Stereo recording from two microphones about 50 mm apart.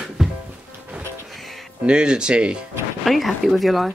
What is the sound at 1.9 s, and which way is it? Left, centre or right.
Speech, centre.